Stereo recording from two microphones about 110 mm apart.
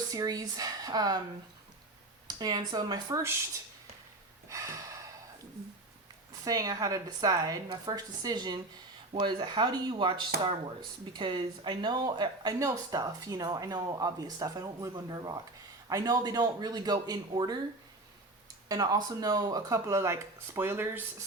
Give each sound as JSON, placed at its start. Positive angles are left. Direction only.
{"t": 0.1, "sound": "speech", "side_deg": -35}
{"t": 2.2, "sound": "speech", "side_deg": -40}
{"t": 4.4, "sound": "gasp", "side_deg": -30}
{"t": 6.4, "sound": "speech", "side_deg": -35}
{"t": 18.7, "sound": "speech", "side_deg": -35}